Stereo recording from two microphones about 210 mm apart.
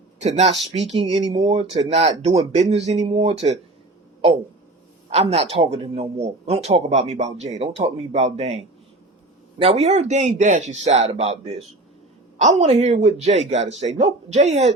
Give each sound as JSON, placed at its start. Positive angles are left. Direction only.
{"t": 0.2, "sound": "a man's voice", "side_deg": -30}
{"t": 1.5, "sound": "a man's voice", "side_deg": -30}
{"t": 5.1, "sound": "a man's voice", "side_deg": -30}
{"t": 12.4, "sound": "a man's voice", "side_deg": -30}